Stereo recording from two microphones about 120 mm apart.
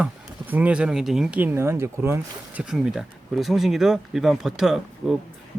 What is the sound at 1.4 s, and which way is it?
Speech, 20° right (ahead or behind).